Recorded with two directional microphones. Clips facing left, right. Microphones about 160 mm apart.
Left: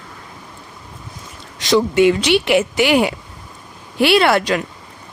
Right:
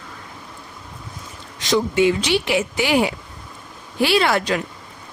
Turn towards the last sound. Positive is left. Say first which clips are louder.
# left 4 dB
turn(degrees=70)  # may be behind; listen again after turning